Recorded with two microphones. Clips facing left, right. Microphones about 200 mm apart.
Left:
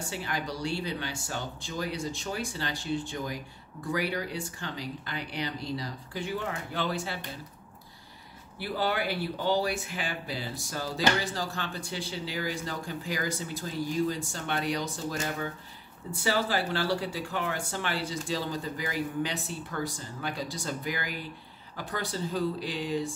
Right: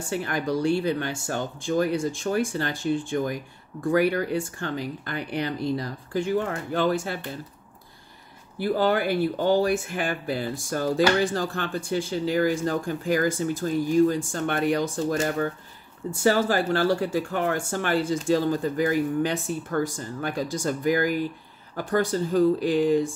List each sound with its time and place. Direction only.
0.1 s speech: 55° right (ahead or behind)
8.5 s speech: 45° right (ahead or behind)